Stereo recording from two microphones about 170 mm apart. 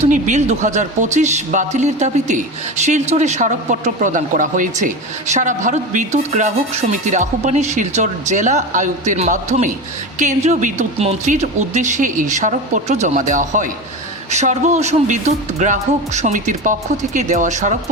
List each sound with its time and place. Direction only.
0.0 s a man's voice: 45° right (ahead or behind)